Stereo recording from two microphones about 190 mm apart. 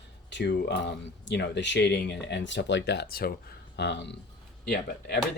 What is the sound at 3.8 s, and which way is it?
Speech, 65° left (ahead or behind).